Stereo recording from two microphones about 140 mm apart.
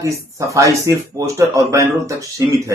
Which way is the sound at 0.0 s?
20° right (ahead or behind).